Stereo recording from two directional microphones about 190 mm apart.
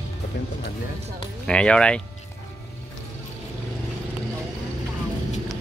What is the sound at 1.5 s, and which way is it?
Speech, 5° left (ahead or behind).